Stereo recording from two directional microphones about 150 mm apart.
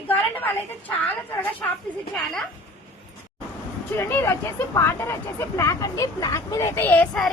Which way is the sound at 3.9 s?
15° left (ahead or behind).